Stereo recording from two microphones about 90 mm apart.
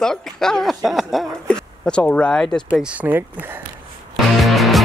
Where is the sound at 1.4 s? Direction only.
10° left (ahead or behind).